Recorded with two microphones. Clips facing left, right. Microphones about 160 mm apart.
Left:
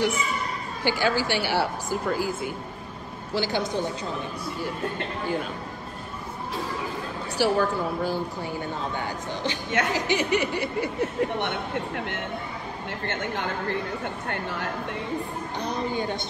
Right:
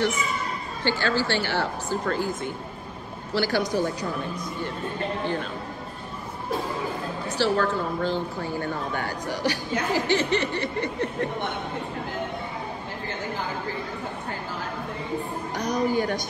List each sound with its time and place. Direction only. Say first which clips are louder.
0.8 s a woman's voice: left 1 dB; 10° left (ahead or behind)
3.3 s speech: right 2 dB; 20° left (ahead or behind)
7.3 s a woman's voice: left 1 dB; 10° left (ahead or behind)
8.9 s a woman's voice: right 2 dB; 20° left (ahead or behind)
11.4 s a man's voice: left 1 dB; 75° left (ahead or behind)
15.6 s speech: right 5 dB; 25° left (ahead or behind)